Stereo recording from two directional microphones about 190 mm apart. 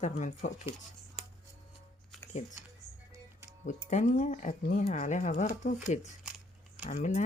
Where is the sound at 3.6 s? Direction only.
40° left (ahead or behind).